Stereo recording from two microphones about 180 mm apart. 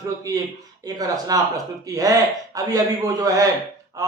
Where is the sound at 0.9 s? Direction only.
20° right (ahead or behind).